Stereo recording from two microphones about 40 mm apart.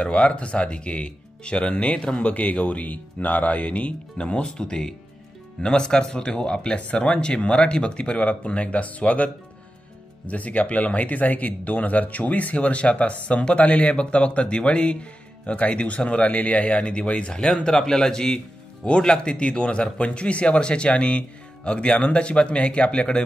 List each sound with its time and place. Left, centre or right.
0.0 s speech: left